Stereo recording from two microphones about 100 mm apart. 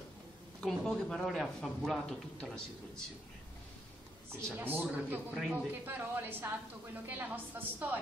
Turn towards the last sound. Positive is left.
turn(degrees=-20)  # may be behind; listen again after turning